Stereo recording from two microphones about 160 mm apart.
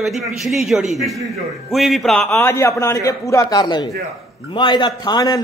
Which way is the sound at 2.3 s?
15° left (ahead or behind).